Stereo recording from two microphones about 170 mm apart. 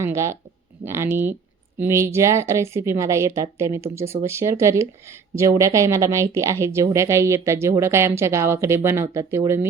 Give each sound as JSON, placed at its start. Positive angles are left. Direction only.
{"t": 0.0, "sound": "speech", "side_deg": -15}